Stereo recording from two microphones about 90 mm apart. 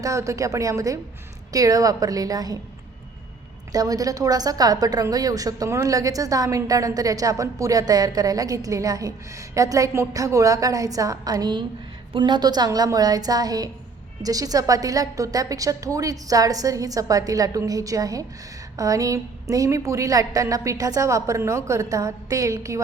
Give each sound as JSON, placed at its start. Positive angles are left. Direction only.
{"t": 0.0, "sound": "a woman's voice", "side_deg": -35}
{"t": 3.7, "sound": "a woman's voice", "side_deg": -40}
{"t": 12.1, "sound": "a woman's voice", "side_deg": -60}